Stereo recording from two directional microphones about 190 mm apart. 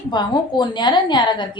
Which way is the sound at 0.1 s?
25° left (ahead or behind).